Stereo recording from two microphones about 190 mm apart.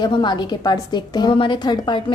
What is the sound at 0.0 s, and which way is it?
A woman's voice, 25° left (ahead or behind).